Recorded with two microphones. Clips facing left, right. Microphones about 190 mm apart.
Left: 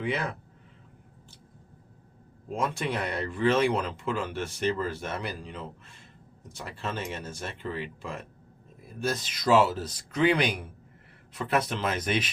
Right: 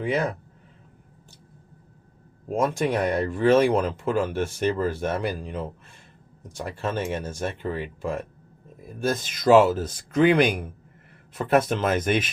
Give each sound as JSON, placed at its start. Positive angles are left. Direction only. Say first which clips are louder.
{"t": 0.0, "sound": "speech", "louder": "right 6 dB", "side_deg": -40}
{"t": 2.5, "sound": "speech", "louder": "right 7 dB", "side_deg": -45}
{"t": 6.7, "sound": "speech", "louder": "right 7 dB", "side_deg": -50}